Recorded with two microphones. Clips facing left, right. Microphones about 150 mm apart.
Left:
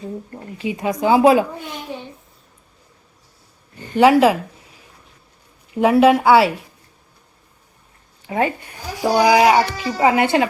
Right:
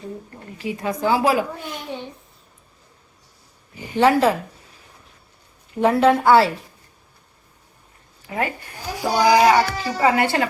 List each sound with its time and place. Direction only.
0.6 s a woman's voice: 20° left (ahead or behind)
1.9 s a child's voice: centre (ahead or behind)
3.9 s speech: 10° left (ahead or behind)
5.8 s speech: 10° left (ahead or behind)
8.3 s a woman's voice: 25° left (ahead or behind)